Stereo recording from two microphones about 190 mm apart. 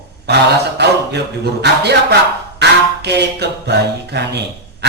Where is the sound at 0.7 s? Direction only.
60° right (ahead or behind).